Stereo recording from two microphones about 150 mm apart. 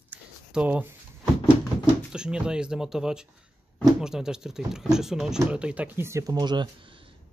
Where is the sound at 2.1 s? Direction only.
5° right (ahead or behind).